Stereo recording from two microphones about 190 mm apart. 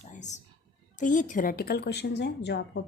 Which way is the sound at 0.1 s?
40° left (ahead or behind).